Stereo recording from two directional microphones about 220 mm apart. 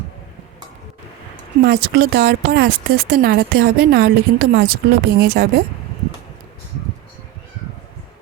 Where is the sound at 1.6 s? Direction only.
50° right (ahead or behind).